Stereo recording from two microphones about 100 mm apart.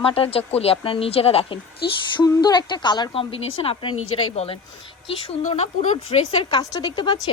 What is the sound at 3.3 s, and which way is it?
Speech, 70° left (ahead or behind).